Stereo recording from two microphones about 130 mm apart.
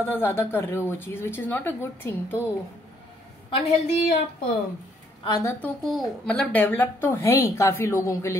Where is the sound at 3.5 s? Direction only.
50° left (ahead or behind).